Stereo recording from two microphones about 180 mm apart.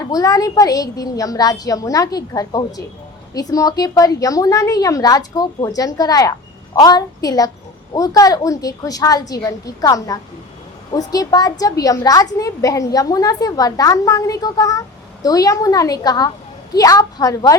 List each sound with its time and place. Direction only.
0.1 s a woman's voice: 20° left (ahead or behind)